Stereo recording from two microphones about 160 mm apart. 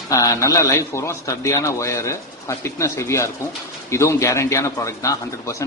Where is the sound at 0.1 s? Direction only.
20° left (ahead or behind).